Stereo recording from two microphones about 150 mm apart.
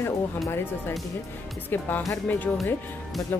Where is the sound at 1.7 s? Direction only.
15° left (ahead or behind).